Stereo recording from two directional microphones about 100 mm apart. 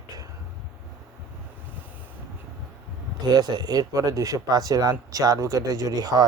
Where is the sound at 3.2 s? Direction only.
45° right (ahead or behind).